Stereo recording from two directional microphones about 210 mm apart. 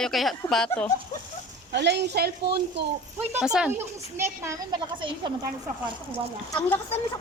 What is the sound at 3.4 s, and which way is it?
Speech, 5° right (ahead or behind).